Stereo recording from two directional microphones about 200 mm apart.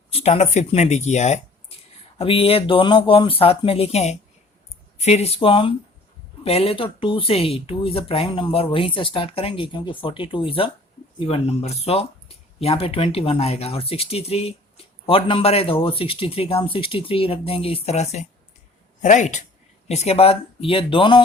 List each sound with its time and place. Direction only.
0.1 s speech: 30° left (ahead or behind)